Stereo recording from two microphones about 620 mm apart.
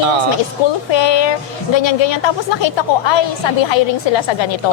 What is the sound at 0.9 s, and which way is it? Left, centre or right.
A woman's voice, left.